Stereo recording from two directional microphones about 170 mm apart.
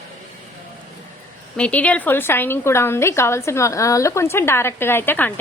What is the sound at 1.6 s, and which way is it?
A woman's voice, 5° left (ahead or behind).